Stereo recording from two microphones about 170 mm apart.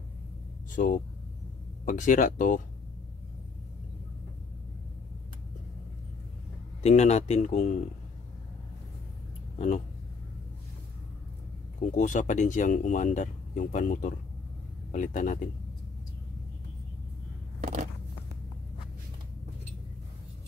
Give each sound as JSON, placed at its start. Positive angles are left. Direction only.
{"t": 0.7, "sound": "speech", "side_deg": 50}
{"t": 6.8, "sound": "speech", "side_deg": 40}
{"t": 11.9, "sound": "speech", "side_deg": 45}
{"t": 17.6, "sound": "biting", "side_deg": -50}